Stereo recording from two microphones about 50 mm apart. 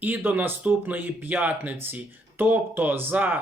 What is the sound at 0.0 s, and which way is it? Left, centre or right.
Speech, right.